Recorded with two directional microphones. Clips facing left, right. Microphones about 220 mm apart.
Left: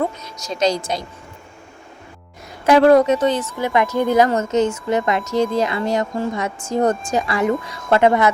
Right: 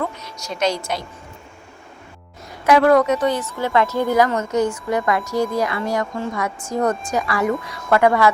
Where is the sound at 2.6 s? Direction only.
30° left (ahead or behind).